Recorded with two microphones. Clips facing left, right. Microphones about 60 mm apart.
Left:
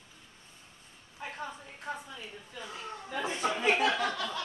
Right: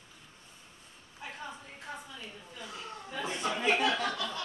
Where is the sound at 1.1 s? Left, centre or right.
Left.